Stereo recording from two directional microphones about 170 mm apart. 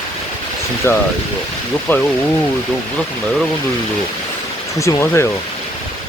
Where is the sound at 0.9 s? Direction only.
15° left (ahead or behind).